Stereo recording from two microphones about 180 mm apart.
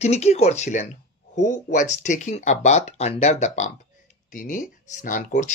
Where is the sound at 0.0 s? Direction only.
35° left (ahead or behind).